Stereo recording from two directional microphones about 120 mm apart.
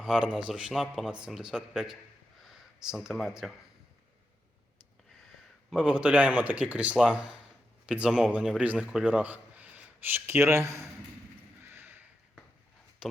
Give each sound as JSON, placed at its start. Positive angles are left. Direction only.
{"t": 0.0, "sound": "speech", "side_deg": 5}
{"t": 5.7, "sound": "a man's voice", "side_deg": -5}
{"t": 11.6, "sound": "a sound", "side_deg": -20}